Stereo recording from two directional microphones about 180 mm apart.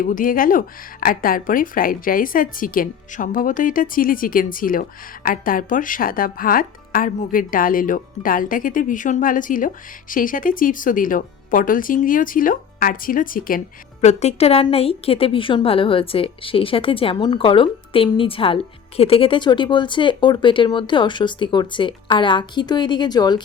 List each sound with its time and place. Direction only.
0.0 s speech: 50° left (ahead or behind)
14.0 s a woman's voice: 40° left (ahead or behind)